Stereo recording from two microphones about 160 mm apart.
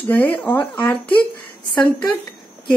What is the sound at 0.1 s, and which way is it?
A woman's voice, 10° left (ahead or behind).